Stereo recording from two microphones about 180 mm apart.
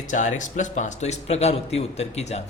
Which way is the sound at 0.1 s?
45° left (ahead or behind).